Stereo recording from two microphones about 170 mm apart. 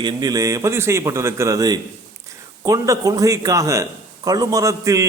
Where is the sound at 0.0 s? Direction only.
25° right (ahead or behind).